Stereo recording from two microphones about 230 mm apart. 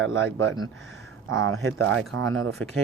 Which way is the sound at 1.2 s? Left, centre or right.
Right.